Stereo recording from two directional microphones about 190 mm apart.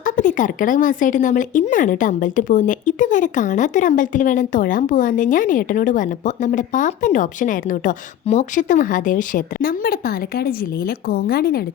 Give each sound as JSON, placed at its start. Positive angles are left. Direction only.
{"t": 0.0, "sound": "speech", "side_deg": 45}